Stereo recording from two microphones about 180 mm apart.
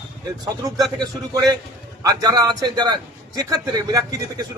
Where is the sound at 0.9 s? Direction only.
20° right (ahead or behind).